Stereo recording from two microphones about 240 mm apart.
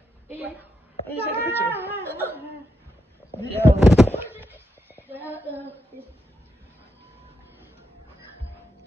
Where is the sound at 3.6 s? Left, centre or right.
Centre.